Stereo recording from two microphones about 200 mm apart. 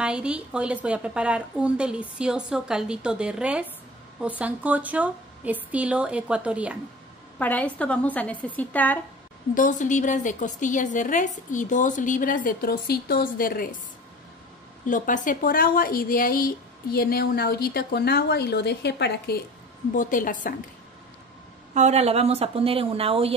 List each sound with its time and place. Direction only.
0.0 s a woman's voice: 5° right (ahead or behind)
7.3 s a woman's voice: 5° left (ahead or behind)
9.6 s a woman's voice: 40° left (ahead or behind)
14.9 s a woman's voice: 40° left (ahead or behind)
20.0 s a woman's voice: 40° left (ahead or behind)
21.7 s speech: 35° right (ahead or behind)